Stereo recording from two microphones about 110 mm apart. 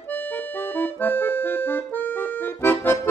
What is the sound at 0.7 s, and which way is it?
Accordion, 15° left (ahead or behind).